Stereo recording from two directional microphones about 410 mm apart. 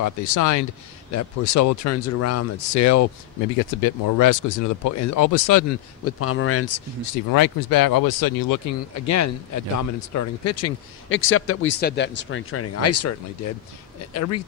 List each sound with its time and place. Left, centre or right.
0.0 s speech: left
3.8 s speech: left
6.1 s speech: left
7.3 s speech: left